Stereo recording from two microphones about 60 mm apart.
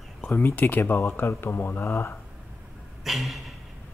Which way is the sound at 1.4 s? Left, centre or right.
Left.